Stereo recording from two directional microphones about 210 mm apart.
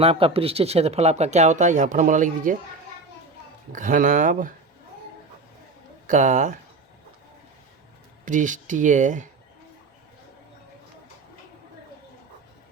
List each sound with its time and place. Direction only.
0.0 s speech: 25° right (ahead or behind)
3.7 s speech: 40° right (ahead or behind)
6.1 s speech: 35° right (ahead or behind)
8.2 s speech: 35° right (ahead or behind)